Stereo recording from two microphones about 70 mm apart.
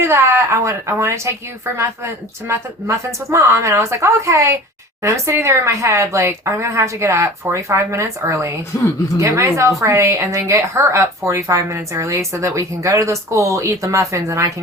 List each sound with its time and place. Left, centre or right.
0.0 s speech: right
2.5 s a woman's voice: right